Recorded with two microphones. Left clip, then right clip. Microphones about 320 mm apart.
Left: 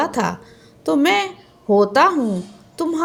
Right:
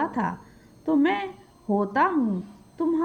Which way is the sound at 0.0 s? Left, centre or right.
Right.